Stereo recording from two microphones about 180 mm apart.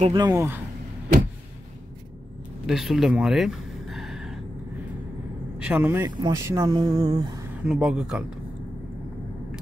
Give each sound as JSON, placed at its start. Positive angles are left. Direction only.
{"t": 0.1, "sound": "speech", "side_deg": -20}
{"t": 2.6, "sound": "a sound", "side_deg": 0}
{"t": 5.6, "sound": "speech", "side_deg": -10}
{"t": 7.6, "sound": "speech", "side_deg": -5}